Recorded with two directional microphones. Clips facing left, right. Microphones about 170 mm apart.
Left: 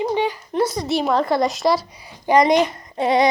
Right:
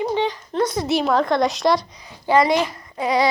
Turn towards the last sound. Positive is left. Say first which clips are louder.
# left 2 dB
turn(degrees=25)  # may be behind; listen again after turning